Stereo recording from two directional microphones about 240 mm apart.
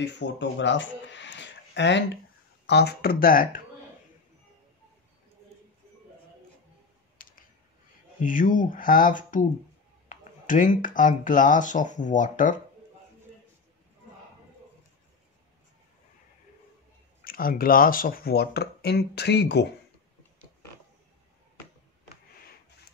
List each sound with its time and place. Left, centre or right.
0.0 s speech: left
7.2 s a sound: left
8.2 s speech: left
17.2 s speech: left